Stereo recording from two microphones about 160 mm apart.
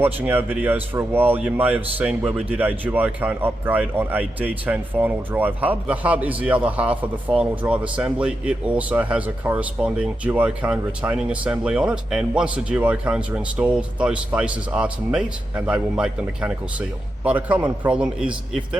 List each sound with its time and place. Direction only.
0.0 s speech: 10° right (ahead or behind)